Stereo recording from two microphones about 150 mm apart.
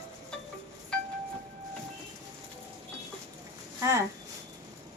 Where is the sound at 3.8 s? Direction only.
20° right (ahead or behind).